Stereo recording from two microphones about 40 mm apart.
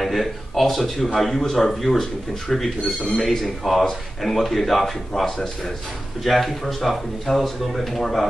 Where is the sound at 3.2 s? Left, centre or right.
Centre.